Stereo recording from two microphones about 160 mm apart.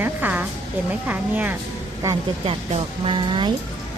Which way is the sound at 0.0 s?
10° right (ahead or behind).